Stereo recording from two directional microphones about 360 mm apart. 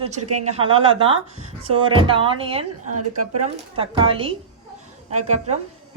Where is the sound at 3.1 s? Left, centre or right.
Right.